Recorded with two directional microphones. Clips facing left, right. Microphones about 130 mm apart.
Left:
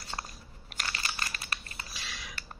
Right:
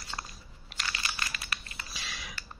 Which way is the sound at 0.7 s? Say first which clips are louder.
Even; 40° left (ahead or behind).